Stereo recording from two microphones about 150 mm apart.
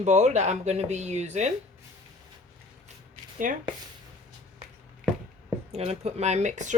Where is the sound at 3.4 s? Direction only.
65° right (ahead or behind).